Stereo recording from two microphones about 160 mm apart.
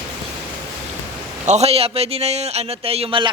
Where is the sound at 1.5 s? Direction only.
40° right (ahead or behind).